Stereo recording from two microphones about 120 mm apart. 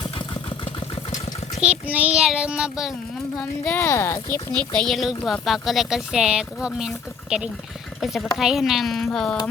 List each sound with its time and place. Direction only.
1.6 s child singing: 10° right (ahead or behind)
3.8 s speech: 25° left (ahead or behind)
4.7 s speech: 5° left (ahead or behind)